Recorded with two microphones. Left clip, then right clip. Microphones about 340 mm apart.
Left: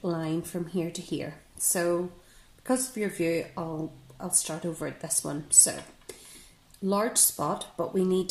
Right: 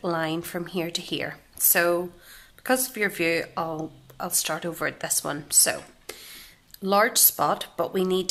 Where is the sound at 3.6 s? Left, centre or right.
Right.